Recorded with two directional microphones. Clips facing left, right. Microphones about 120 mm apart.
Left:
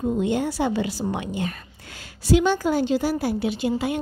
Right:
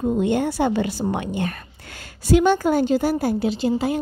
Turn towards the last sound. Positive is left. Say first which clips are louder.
# right 3 dB
turn(degrees=-35)  # may be behind; listen again after turning